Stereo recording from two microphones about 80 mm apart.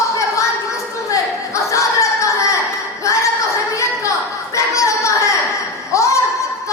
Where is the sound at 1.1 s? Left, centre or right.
Left.